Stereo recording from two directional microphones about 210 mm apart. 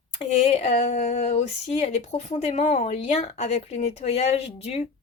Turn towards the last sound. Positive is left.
turn(degrees=30)  # may be behind; listen again after turning